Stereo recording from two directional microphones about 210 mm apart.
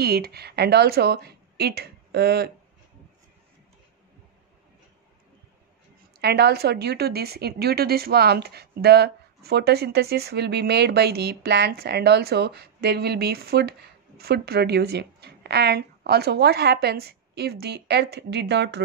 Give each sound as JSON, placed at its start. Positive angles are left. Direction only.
{"t": 0.0, "sound": "speech", "side_deg": -50}
{"t": 6.2, "sound": "a woman's voice", "side_deg": -50}